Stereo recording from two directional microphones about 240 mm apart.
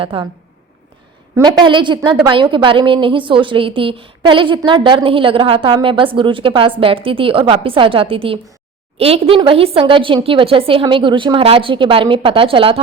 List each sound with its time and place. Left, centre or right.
0.0 s a woman's voice: right
1.4 s a woman's voice: centre